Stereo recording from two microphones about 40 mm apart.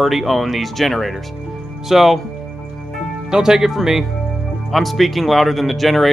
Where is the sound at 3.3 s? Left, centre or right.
Centre.